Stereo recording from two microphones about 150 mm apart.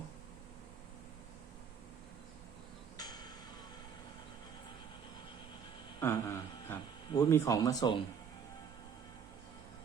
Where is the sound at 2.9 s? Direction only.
30° left (ahead or behind).